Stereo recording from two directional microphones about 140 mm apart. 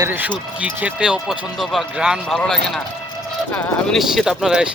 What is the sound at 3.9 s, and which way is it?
Speech, centre (ahead or behind).